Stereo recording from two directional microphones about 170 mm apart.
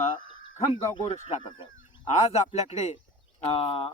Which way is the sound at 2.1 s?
40° left (ahead or behind).